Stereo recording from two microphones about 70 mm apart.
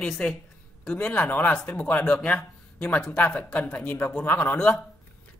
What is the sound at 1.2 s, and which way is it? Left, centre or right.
Speech, left.